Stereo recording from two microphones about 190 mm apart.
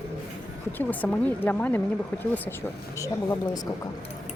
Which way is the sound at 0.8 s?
10° left (ahead or behind).